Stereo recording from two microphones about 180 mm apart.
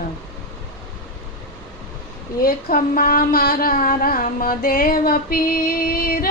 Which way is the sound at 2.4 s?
50° left (ahead or behind).